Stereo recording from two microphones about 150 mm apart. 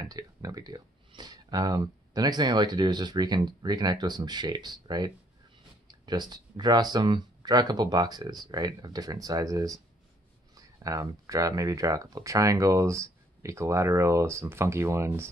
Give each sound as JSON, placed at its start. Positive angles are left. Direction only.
{"t": 0.0, "sound": "speech", "side_deg": -25}